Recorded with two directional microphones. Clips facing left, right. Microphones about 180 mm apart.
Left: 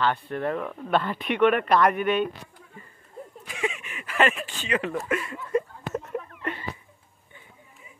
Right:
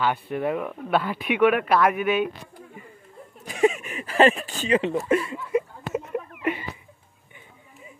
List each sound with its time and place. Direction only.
0.0 s speech: 10° right (ahead or behind)
3.4 s speech: 40° right (ahead or behind)
4.7 s speech: 25° right (ahead or behind)
5.5 s a sound: 10° right (ahead or behind)